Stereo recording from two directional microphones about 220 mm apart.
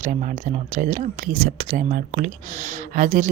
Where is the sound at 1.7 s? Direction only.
35° right (ahead or behind).